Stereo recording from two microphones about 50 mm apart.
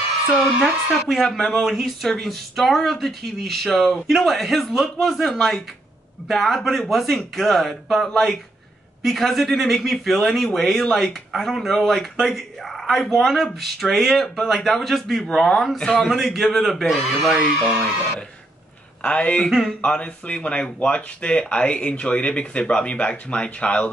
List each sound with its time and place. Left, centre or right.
0.6 s speech: centre
19.0 s speech: left